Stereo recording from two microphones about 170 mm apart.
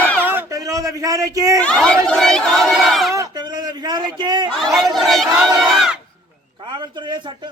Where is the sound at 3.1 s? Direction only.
20° right (ahead or behind).